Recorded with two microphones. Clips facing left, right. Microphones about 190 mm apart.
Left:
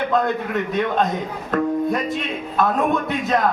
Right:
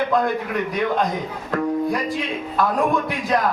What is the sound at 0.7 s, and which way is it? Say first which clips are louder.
A man's voice: left 1 dB; 25° left (ahead or behind).